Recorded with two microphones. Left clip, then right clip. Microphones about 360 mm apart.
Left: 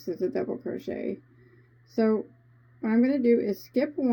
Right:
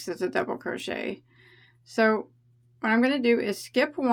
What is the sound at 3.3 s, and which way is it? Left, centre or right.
Speech, centre.